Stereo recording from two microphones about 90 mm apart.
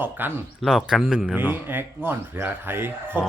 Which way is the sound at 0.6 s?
Centre (ahead or behind).